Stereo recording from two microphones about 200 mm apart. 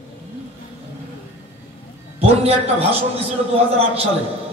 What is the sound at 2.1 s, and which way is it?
A man's voice, 30° right (ahead or behind).